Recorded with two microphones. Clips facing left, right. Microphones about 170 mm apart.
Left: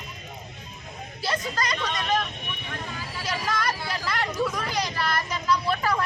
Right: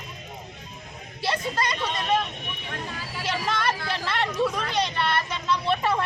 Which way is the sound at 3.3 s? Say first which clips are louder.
Right 2 dB; 30° right (ahead or behind).